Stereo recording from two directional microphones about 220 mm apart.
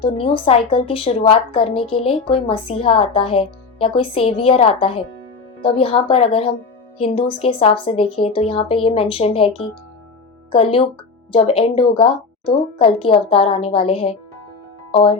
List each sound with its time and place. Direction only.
0.0 s a woman's voice: 25° left (ahead or behind)